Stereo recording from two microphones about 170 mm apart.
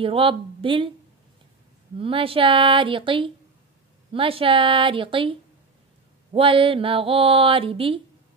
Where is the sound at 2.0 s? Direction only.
30° right (ahead or behind).